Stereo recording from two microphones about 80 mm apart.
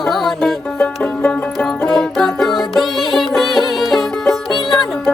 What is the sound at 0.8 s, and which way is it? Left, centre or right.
Music, left.